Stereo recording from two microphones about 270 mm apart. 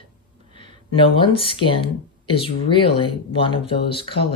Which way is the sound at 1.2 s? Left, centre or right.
Centre.